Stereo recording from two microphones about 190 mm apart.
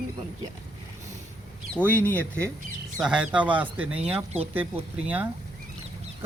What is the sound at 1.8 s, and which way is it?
Speech, 10° left (ahead or behind).